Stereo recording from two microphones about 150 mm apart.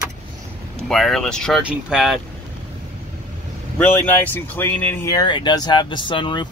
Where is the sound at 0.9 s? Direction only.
Centre (ahead or behind).